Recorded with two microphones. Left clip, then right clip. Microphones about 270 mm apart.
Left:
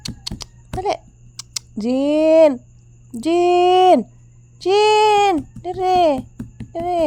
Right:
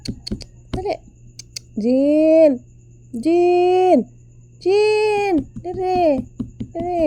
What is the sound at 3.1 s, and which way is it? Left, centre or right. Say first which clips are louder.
Speech: even; centre.